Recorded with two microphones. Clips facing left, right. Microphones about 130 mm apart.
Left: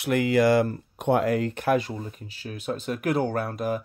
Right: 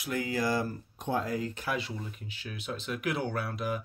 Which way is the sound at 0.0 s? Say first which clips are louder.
Left 10 dB; 75° left (ahead or behind).